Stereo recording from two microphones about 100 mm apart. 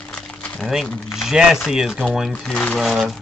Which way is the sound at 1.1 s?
5° right (ahead or behind).